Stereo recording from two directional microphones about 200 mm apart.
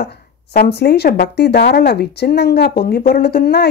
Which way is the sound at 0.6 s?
55° left (ahead or behind).